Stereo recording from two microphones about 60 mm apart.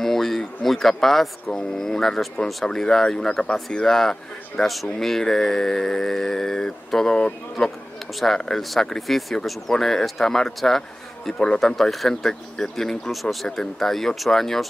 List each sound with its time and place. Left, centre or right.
0.0 s speech: centre
11.7 s speech: centre